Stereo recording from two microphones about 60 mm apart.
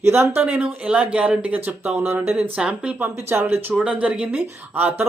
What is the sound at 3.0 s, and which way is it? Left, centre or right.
Speech, right.